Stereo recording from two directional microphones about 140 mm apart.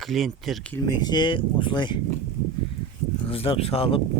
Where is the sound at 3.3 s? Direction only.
45° left (ahead or behind).